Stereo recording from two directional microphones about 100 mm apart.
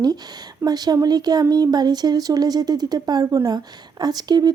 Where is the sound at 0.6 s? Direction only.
40° right (ahead or behind).